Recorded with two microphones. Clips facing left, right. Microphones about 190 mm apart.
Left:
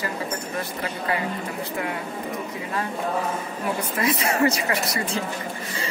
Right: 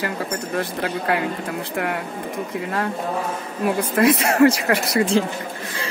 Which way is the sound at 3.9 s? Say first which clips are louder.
Right 8 dB; 70° right (ahead or behind).